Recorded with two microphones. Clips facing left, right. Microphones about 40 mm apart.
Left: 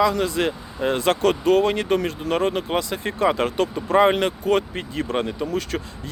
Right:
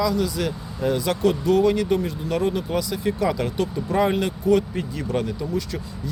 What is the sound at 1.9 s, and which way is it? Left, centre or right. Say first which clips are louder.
Speech: left 2 dB; left.